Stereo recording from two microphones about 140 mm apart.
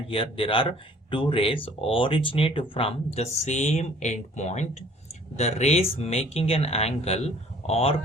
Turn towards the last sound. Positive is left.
turn(degrees=45)  # may be behind; listen again after turning